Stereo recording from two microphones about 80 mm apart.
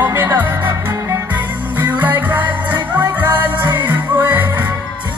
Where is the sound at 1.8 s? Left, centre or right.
Right.